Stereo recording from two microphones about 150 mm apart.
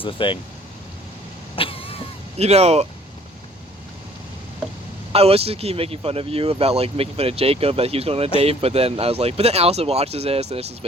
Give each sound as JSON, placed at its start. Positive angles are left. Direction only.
{"t": 0.0, "sound": "speech", "side_deg": 35}
{"t": 1.5, "sound": "vehicle", "side_deg": 40}
{"t": 2.4, "sound": "speech", "side_deg": -45}
{"t": 5.1, "sound": "speech", "side_deg": -40}